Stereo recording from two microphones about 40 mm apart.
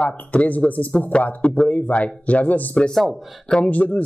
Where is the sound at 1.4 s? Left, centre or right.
Left.